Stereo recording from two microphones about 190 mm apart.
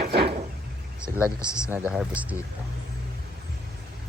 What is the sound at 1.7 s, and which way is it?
Speech, 5° right (ahead or behind).